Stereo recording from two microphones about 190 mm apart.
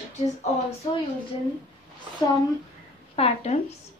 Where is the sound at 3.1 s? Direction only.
35° left (ahead or behind).